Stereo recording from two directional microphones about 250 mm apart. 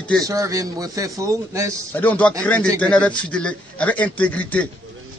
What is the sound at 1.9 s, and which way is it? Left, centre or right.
A man's voice, centre.